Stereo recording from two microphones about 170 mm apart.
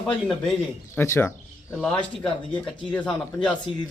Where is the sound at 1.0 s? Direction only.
15° left (ahead or behind).